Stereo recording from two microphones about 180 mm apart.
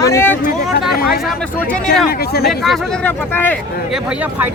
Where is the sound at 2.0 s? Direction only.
60° left (ahead or behind).